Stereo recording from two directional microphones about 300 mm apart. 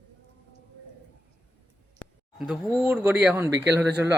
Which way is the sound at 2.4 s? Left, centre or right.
Centre.